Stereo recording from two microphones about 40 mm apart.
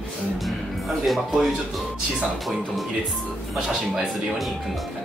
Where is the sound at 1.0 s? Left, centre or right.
Centre.